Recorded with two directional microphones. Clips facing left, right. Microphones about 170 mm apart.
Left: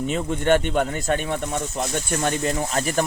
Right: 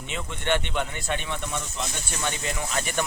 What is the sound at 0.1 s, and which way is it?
Speech, 40° left (ahead or behind).